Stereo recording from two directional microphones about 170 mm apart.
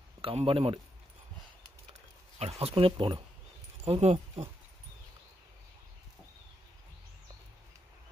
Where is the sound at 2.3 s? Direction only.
35° right (ahead or behind).